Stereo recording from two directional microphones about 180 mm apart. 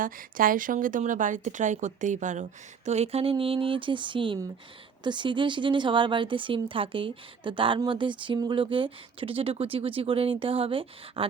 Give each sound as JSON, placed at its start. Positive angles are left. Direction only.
{"t": 0.0, "sound": "a woman's voice", "side_deg": -50}